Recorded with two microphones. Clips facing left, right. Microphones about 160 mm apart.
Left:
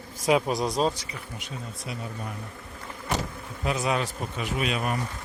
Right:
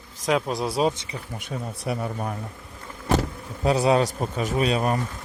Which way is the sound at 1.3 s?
55° right (ahead or behind).